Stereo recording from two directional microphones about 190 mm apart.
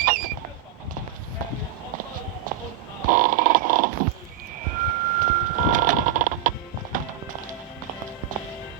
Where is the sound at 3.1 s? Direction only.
45° right (ahead or behind).